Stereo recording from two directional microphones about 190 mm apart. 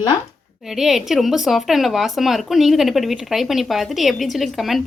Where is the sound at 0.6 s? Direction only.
Centre (ahead or behind).